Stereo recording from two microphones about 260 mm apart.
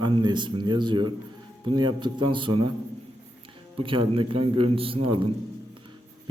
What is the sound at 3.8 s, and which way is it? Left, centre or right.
Speech, centre.